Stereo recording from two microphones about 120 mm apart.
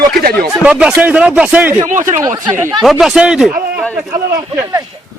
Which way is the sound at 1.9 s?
90° right.